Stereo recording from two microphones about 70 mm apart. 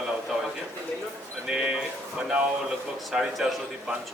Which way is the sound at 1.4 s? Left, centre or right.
Centre.